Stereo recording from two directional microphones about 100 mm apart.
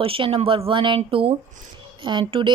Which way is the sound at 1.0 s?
70° right (ahead or behind).